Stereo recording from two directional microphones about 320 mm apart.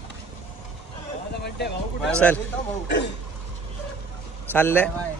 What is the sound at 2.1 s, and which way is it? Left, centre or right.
Speech, centre.